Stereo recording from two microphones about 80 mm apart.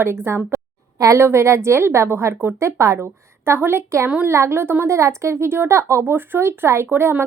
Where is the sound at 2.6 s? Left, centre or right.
Right.